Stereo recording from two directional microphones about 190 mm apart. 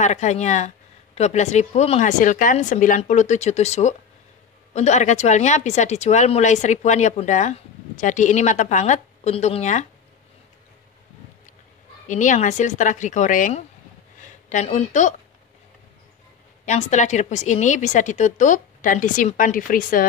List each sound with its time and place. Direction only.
0.0 s speech: 35° left (ahead or behind)
12.1 s speech: 40° left (ahead or behind)
16.6 s speech: 40° left (ahead or behind)